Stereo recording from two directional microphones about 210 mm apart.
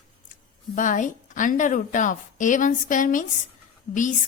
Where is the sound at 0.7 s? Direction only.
35° left (ahead or behind).